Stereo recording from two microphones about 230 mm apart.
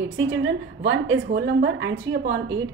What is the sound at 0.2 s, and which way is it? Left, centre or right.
A woman's voice, right.